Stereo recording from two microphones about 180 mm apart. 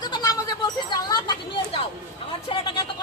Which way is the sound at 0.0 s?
20° left (ahead or behind).